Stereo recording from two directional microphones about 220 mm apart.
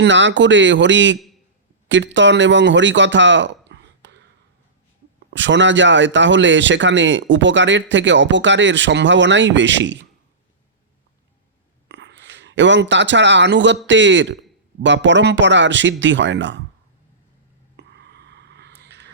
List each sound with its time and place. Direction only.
0.0 s speech: 55° right (ahead or behind)
5.3 s speech: 55° right (ahead or behind)
11.9 s a man's voice: 50° right (ahead or behind)
17.7 s a sound: 50° right (ahead or behind)